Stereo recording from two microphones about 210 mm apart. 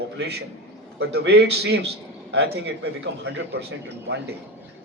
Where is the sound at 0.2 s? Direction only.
50° right (ahead or behind).